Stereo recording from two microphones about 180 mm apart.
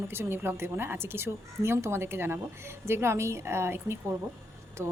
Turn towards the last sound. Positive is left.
turn(degrees=-15)  # may be behind; listen again after turning